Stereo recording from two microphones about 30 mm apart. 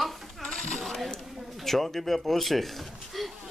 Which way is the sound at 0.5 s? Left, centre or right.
Left.